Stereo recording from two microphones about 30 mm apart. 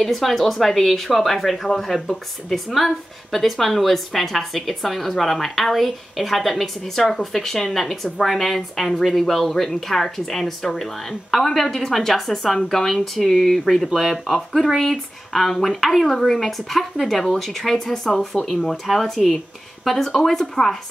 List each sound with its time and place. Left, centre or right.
0.0 s speech: centre
9.3 s speech: centre
12.8 s speech: centre